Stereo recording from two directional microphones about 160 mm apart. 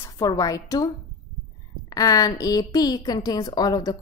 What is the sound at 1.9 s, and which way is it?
A woman's voice, 25° left (ahead or behind).